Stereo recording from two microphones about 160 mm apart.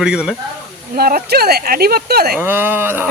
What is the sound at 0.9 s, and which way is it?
Speech, 70° right (ahead or behind).